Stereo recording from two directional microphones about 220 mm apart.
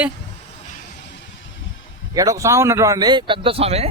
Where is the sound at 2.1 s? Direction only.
15° right (ahead or behind).